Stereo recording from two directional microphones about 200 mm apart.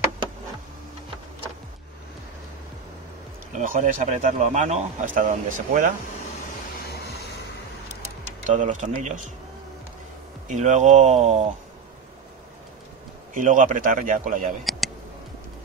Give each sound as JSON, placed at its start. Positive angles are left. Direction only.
{"t": 3.5, "sound": "speech", "side_deg": -40}
{"t": 6.8, "sound": "vehicle", "side_deg": 55}
{"t": 8.5, "sound": "speech", "side_deg": -40}
{"t": 10.5, "sound": "speech", "side_deg": -35}
{"t": 13.3, "sound": "speech", "side_deg": -40}
{"t": 14.6, "sound": "a sound", "side_deg": 0}